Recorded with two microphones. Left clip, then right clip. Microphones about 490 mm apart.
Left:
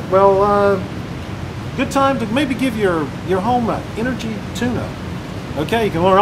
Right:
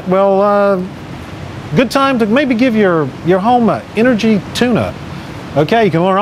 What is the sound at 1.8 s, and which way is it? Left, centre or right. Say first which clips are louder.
Speech: right 5 dB; right.